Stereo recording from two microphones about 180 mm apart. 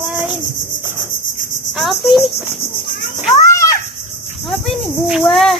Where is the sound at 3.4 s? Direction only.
15° left (ahead or behind).